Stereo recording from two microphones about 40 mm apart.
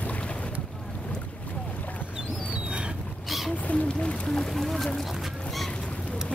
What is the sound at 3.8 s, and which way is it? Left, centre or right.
Boat, left.